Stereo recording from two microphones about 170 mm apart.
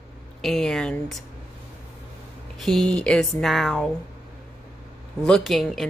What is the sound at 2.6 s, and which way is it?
A woman's voice, centre (ahead or behind).